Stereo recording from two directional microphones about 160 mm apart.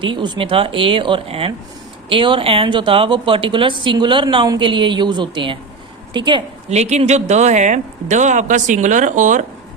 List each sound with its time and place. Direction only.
0.0 s a woman's voice: 30° right (ahead or behind)
6.7 s speech: 45° right (ahead or behind)